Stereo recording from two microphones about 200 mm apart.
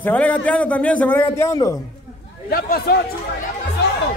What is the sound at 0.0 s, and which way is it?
A man's voice, 5° left (ahead or behind).